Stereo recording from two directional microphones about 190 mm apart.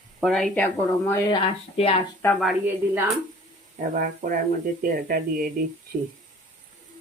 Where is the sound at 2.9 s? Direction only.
Centre (ahead or behind).